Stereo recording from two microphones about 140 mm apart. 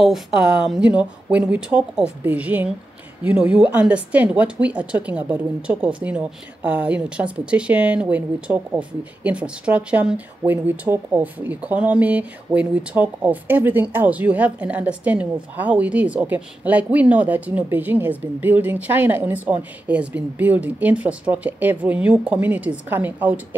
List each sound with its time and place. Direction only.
0.0 s a woman's voice: 5° right (ahead or behind)